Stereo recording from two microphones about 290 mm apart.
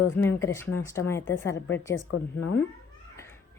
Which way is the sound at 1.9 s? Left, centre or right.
Left.